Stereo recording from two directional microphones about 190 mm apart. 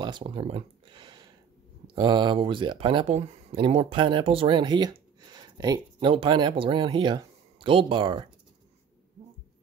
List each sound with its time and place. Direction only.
0.0 s speech: 25° right (ahead or behind)